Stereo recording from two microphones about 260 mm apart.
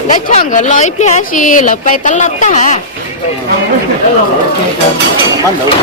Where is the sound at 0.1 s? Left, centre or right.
Left.